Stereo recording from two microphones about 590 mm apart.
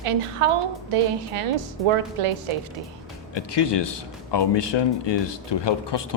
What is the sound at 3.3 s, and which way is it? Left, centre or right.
Speech, left.